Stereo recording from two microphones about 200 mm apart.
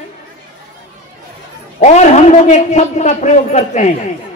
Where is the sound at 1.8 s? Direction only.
35° left (ahead or behind).